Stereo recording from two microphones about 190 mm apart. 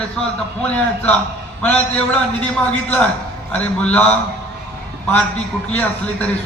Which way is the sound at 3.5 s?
5° left (ahead or behind).